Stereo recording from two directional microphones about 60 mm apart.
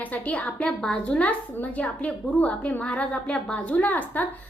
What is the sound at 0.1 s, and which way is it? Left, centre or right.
Speech, left.